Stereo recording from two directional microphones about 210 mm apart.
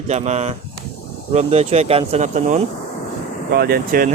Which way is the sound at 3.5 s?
45° right (ahead or behind).